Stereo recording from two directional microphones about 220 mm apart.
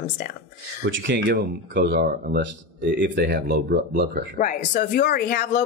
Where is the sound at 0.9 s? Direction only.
55° right (ahead or behind).